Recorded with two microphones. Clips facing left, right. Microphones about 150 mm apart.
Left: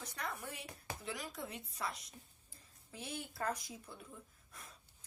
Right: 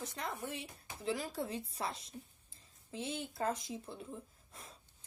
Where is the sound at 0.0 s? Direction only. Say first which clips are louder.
Right 3 dB; 25° right (ahead or behind).